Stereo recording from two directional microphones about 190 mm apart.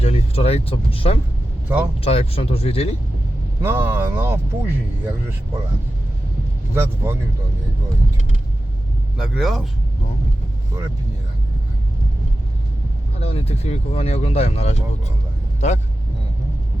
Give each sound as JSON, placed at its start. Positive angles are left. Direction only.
{"t": 0.0, "sound": "speech", "side_deg": 35}
{"t": 1.6, "sound": "speech", "side_deg": -10}
{"t": 2.0, "sound": "speech", "side_deg": 30}
{"t": 3.6, "sound": "speech", "side_deg": -10}
{"t": 6.7, "sound": "speech", "side_deg": -10}
{"t": 9.1, "sound": "speech", "side_deg": -5}
{"t": 13.1, "sound": "speech", "side_deg": 30}